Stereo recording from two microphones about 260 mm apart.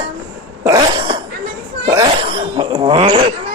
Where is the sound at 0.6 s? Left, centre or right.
Centre.